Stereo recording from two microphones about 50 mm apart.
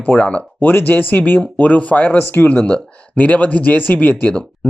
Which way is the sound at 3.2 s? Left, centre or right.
Left.